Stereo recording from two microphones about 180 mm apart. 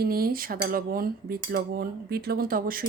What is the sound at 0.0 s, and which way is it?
Speech, 55° right (ahead or behind).